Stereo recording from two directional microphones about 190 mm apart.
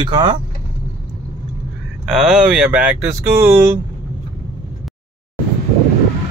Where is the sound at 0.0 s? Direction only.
25° right (ahead or behind).